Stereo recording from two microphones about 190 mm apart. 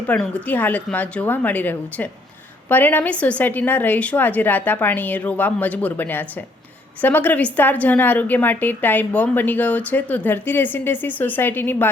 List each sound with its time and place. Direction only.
0.1 s a woman's voice: 10° left (ahead or behind)